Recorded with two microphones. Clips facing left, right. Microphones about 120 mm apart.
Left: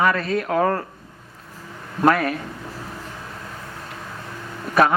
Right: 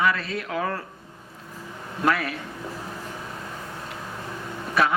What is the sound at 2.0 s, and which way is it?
Speech, 45° left (ahead or behind).